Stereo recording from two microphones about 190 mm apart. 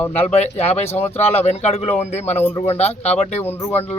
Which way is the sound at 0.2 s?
35° left (ahead or behind).